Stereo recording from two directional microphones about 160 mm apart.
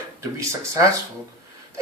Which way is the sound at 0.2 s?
20° right (ahead or behind).